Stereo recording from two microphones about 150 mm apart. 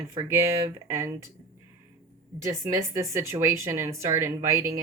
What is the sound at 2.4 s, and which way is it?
Speech, 20° right (ahead or behind).